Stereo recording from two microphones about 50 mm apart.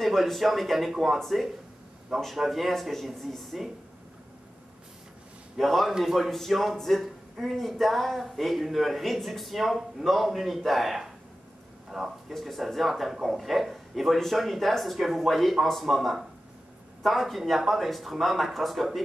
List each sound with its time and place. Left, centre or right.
0.0 s speech: centre
5.6 s speech: centre